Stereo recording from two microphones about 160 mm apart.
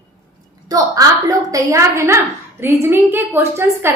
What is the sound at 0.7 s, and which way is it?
A woman's voice, 20° right (ahead or behind).